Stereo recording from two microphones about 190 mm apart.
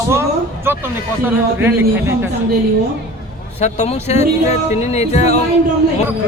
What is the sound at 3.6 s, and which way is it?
Speech, 35° left (ahead or behind).